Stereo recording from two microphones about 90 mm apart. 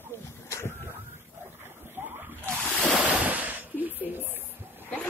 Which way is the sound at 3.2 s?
20° right (ahead or behind).